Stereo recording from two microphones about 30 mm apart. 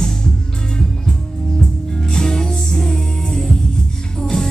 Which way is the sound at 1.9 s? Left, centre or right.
Left.